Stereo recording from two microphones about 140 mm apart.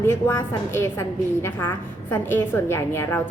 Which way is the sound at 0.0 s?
15° left (ahead or behind).